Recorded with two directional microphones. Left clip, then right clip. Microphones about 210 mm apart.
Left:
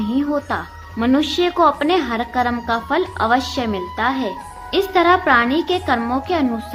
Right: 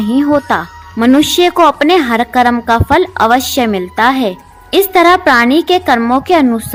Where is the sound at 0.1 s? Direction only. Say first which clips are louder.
Right 10 dB; 35° right (ahead or behind).